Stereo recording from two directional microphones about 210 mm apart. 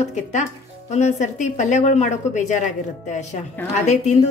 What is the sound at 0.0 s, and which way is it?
Speech, 35° left (ahead or behind).